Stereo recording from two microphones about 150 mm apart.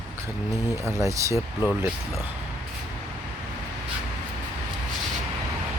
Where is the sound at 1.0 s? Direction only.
15° right (ahead or behind).